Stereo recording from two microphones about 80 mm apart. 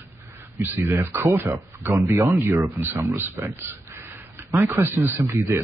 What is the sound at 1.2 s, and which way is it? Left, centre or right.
Speech, right.